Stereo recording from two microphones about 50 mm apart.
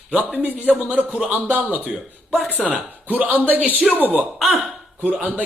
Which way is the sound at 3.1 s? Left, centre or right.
Right.